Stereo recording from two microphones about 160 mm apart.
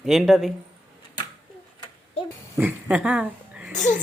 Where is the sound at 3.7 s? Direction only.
50° left (ahead or behind).